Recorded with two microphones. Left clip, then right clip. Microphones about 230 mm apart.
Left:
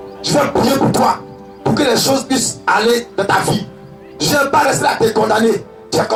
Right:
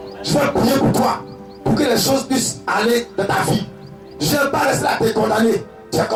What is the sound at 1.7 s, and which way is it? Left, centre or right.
Speech, left.